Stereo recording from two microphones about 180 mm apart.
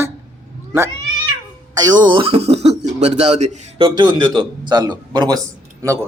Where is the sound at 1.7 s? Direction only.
20° right (ahead or behind).